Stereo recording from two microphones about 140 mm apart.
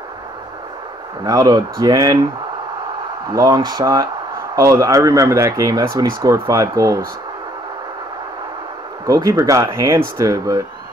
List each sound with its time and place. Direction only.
1.2 s speech: 25° right (ahead or behind)
3.3 s speech: 25° right (ahead or behind)
9.0 s speech: 20° right (ahead or behind)